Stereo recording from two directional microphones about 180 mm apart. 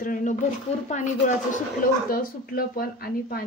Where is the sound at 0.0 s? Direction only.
45° left (ahead or behind).